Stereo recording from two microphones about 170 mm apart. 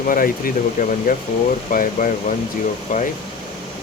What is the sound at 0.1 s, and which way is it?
Speech, 55° left (ahead or behind).